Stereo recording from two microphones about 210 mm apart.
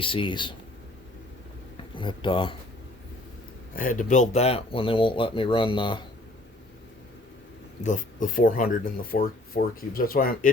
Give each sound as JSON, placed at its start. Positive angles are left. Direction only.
{"t": 0.0, "sound": "speech", "side_deg": 25}
{"t": 2.0, "sound": "speech", "side_deg": 25}
{"t": 3.8, "sound": "speech", "side_deg": 40}
{"t": 7.9, "sound": "speech", "side_deg": 40}